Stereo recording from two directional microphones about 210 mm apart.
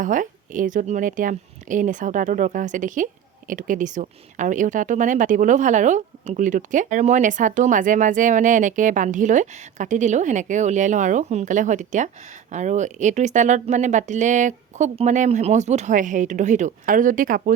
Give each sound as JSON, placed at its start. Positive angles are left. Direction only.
{"t": 0.0, "sound": "a woman's voice", "side_deg": -40}